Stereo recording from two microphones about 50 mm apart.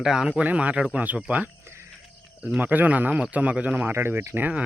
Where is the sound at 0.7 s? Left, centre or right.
Centre.